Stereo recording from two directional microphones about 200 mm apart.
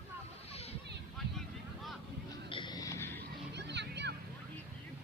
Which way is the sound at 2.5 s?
20° left (ahead or behind).